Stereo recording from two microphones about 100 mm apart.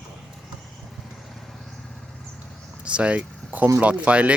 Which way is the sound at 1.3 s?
Centre (ahead or behind).